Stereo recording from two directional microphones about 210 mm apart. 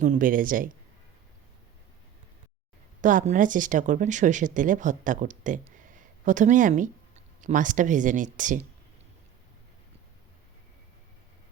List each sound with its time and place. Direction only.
0.0 s speech: 40° right (ahead or behind)
3.0 s speech: 40° right (ahead or behind)